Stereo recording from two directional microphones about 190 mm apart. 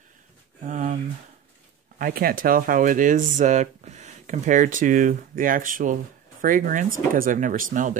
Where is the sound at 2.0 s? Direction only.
50° right (ahead or behind).